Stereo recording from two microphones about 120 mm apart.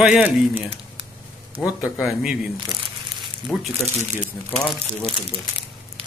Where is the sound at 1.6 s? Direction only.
10° right (ahead or behind).